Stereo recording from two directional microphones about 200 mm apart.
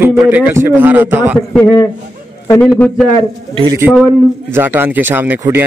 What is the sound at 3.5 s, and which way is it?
Speech, 25° right (ahead or behind).